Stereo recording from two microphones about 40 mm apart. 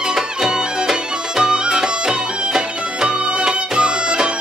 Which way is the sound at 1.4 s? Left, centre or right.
Centre.